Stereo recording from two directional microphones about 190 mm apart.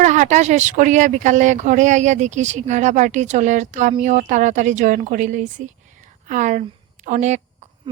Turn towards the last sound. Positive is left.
turn(degrees=-40)  # may be behind; listen again after turning